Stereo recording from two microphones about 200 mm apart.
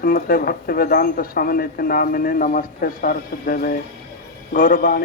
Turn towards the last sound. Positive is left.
turn(degrees=45)  # may be behind; listen again after turning